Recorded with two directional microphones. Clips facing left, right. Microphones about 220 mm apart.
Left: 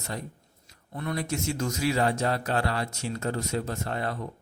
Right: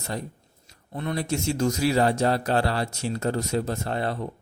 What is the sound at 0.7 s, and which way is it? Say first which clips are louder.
A man's voice: right 3 dB; 25° right (ahead or behind).